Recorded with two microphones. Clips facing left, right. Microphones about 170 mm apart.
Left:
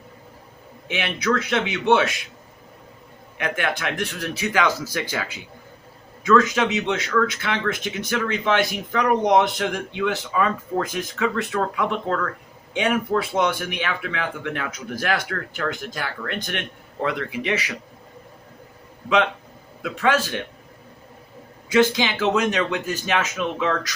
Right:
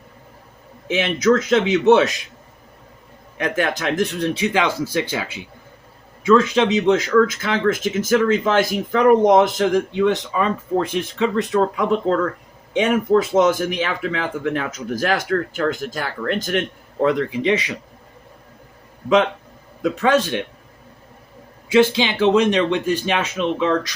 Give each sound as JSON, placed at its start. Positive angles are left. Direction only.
{"t": 0.9, "sound": "speech", "side_deg": -35}
{"t": 3.3, "sound": "speech", "side_deg": -40}
{"t": 4.4, "sound": "speech", "side_deg": -20}
{"t": 6.2, "sound": "speech", "side_deg": -30}
{"t": 12.7, "sound": "speech", "side_deg": -40}
{"t": 19.8, "sound": "speech", "side_deg": -35}
{"t": 21.7, "sound": "speech", "side_deg": -25}